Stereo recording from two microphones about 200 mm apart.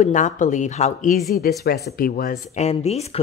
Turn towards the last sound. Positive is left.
turn(degrees=30)  # may be behind; listen again after turning